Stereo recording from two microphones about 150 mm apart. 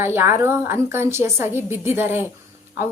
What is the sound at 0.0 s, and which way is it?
Speech, 15° right (ahead or behind).